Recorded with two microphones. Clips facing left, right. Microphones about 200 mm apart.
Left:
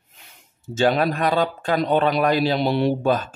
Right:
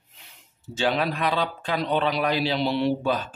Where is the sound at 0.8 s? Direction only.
45° left (ahead or behind).